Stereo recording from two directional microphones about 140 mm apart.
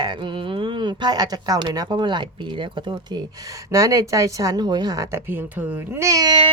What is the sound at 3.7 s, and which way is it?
Speech, 25° right (ahead or behind).